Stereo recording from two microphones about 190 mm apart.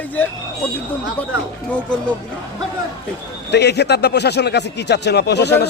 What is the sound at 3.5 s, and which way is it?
Speech, 60° left (ahead or behind).